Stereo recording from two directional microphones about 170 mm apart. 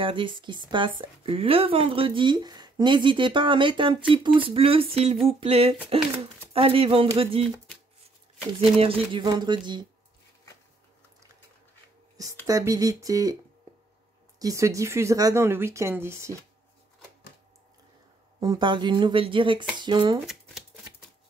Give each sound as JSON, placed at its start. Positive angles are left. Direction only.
{"t": 0.0, "sound": "speech", "side_deg": -30}
{"t": 8.7, "sound": "speech", "side_deg": -35}
{"t": 12.4, "sound": "speech", "side_deg": -20}
{"t": 14.4, "sound": "a woman's voice", "side_deg": -20}
{"t": 18.4, "sound": "speech", "side_deg": -25}